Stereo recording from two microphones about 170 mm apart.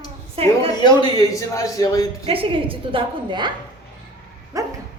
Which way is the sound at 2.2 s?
35° right (ahead or behind).